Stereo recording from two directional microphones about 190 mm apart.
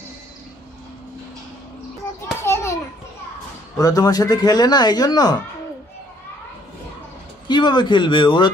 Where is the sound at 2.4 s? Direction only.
15° left (ahead or behind).